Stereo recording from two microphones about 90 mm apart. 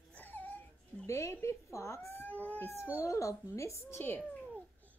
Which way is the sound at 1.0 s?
30° left (ahead or behind).